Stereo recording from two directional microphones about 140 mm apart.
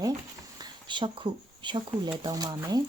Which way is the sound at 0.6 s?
35° right (ahead or behind).